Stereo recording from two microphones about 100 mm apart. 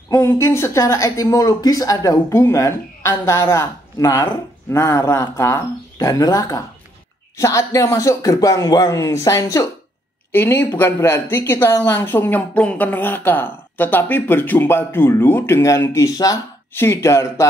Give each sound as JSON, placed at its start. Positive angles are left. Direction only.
{"t": 0.1, "sound": "speech", "side_deg": 30}
{"t": 10.3, "sound": "speech", "side_deg": 20}
{"t": 16.7, "sound": "speech", "side_deg": 25}